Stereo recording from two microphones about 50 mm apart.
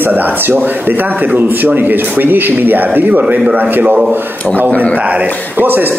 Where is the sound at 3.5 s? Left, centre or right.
Right.